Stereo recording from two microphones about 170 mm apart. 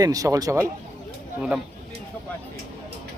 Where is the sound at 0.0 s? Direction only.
20° right (ahead or behind).